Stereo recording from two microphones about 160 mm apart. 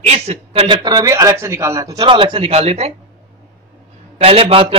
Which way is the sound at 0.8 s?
25° right (ahead or behind).